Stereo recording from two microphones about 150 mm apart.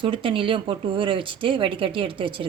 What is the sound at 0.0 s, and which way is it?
A woman's voice, 35° right (ahead or behind).